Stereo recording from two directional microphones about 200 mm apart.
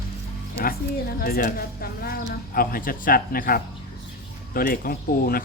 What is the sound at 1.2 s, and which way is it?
Speech, 45° left (ahead or behind).